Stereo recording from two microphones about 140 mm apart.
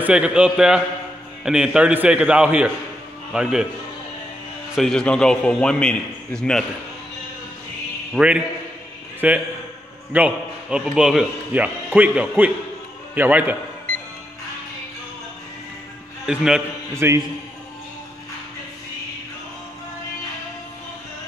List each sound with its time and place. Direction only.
0.0 s a man's voice: 5° right (ahead or behind)
4.7 s a man's voice: 5° left (ahead or behind)
8.1 s a man's voice: 5° right (ahead or behind)
16.3 s a man's voice: 5° right (ahead or behind)
16.9 s a man's voice: 20° right (ahead or behind)